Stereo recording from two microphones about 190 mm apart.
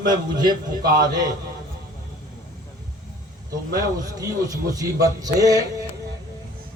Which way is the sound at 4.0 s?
20° right (ahead or behind).